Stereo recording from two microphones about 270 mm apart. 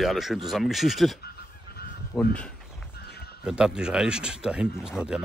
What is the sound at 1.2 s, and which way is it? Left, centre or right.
Goose, left.